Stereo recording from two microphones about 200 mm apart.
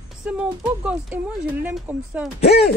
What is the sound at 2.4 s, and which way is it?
Speech, 30° left (ahead or behind).